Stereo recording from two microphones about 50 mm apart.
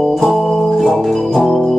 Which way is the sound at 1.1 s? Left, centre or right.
Centre.